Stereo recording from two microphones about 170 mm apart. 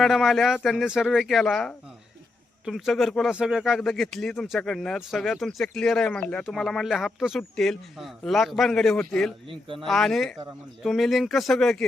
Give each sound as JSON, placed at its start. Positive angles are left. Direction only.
{"t": 0.0, "sound": "speech", "side_deg": 0}
{"t": 9.5, "sound": "speech", "side_deg": -30}
{"t": 9.8, "sound": "speech", "side_deg": 0}